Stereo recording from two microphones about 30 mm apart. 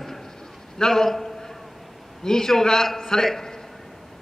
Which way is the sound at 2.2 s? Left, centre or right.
Centre.